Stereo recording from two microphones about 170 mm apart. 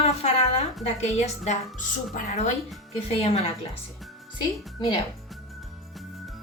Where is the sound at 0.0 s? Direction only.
40° left (ahead or behind).